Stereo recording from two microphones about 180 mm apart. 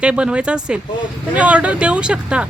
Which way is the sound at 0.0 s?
5° right (ahead or behind).